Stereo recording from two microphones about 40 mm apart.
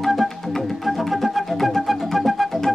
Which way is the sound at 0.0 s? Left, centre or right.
Centre.